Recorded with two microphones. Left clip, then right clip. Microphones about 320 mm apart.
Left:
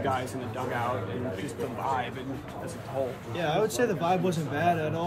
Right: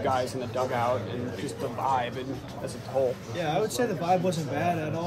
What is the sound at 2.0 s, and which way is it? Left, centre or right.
Speech, right.